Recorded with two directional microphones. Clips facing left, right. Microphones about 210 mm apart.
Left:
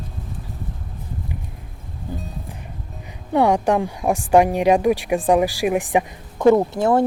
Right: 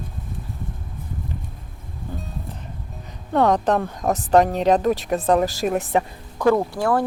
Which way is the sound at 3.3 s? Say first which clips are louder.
Left 1 dB; 10° left (ahead or behind).